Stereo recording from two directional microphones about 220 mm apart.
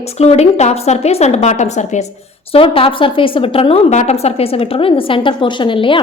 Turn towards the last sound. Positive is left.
turn(degrees=25)  # may be behind; listen again after turning